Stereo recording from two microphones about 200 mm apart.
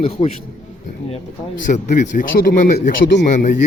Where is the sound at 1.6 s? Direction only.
40° left (ahead or behind).